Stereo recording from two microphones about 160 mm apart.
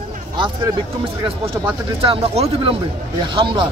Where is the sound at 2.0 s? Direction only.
35° right (ahead or behind).